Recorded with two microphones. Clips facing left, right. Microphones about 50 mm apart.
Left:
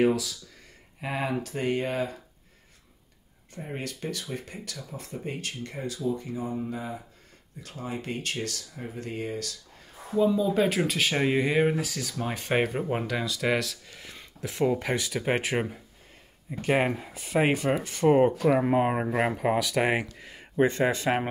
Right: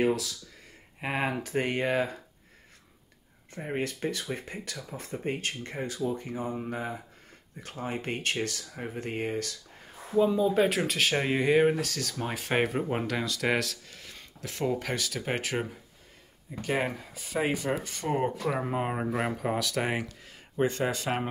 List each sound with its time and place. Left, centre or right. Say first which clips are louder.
0.0 s speech: left 3 dB; centre
1.2 s speech: left 1 dB; right
3.5 s speech: right 4 dB; right
10.1 s speech: even; centre
10.6 s speech: left 1 dB; centre
11.7 s speech: left 1 dB; centre
13.9 s speech: left 2 dB; centre